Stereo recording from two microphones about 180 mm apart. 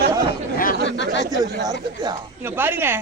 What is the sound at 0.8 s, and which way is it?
Speech, 85° left.